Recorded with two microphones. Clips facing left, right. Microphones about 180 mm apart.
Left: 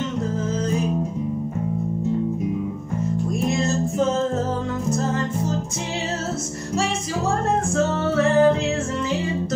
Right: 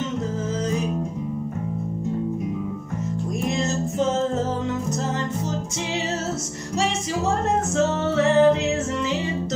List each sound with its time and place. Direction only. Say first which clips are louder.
7.7 s music: even; 25° right (ahead or behind)